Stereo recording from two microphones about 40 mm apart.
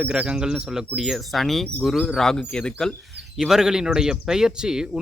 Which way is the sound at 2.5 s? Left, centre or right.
Left.